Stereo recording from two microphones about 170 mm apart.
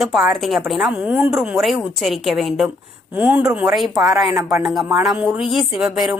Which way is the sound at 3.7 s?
Centre (ahead or behind).